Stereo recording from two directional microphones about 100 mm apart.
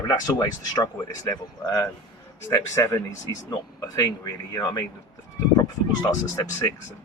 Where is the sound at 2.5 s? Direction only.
30° left (ahead or behind).